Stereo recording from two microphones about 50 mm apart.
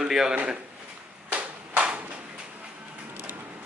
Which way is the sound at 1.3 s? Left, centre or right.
Right.